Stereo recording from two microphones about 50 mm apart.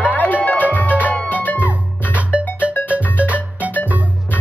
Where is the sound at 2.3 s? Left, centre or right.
Right.